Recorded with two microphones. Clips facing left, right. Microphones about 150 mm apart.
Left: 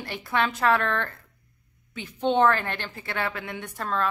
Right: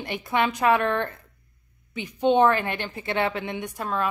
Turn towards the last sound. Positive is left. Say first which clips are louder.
# right 1 dB
turn(degrees=-15)  # may be behind; listen again after turning